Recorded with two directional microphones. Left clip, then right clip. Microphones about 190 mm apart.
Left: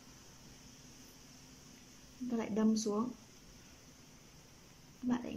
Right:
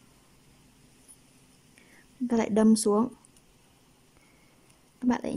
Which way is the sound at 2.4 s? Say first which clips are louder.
Right 11 dB; 35° right (ahead or behind).